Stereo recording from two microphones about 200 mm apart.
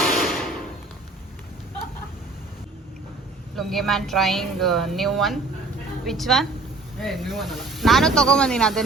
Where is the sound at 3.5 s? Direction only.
Centre (ahead or behind).